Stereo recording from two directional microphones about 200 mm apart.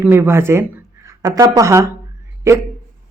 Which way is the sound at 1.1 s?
15° right (ahead or behind).